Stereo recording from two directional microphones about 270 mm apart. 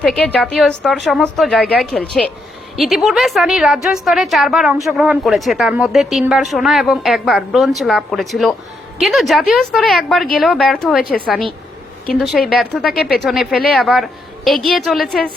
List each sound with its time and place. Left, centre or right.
0.0 s a woman's voice: centre
12.5 s a woman's voice: centre